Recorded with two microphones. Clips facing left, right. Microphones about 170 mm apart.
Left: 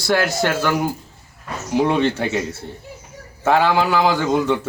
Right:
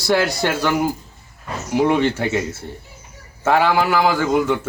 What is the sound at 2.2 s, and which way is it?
Speech, 15° left (ahead or behind).